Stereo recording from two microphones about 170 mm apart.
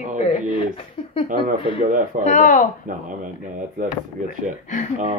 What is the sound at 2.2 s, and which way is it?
Speech, 45° left (ahead or behind).